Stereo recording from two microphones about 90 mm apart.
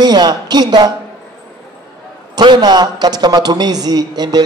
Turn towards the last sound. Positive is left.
turn(degrees=-50)  # may be behind; listen again after turning